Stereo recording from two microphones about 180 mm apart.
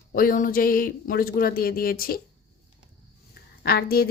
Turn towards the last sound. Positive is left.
turn(degrees=60)  # may be behind; listen again after turning